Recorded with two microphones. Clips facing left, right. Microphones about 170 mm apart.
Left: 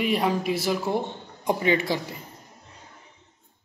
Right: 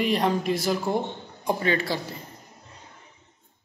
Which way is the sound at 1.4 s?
15° left (ahead or behind).